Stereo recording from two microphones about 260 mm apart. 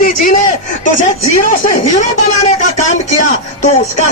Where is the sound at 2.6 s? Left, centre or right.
Left.